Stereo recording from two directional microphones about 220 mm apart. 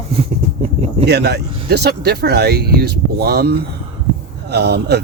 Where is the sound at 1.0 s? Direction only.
50° right (ahead or behind).